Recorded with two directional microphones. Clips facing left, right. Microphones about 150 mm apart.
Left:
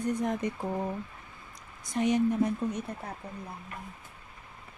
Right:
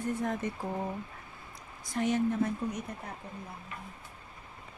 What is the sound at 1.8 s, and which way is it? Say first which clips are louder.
Speech: left 3 dB; 20° left (ahead or behind).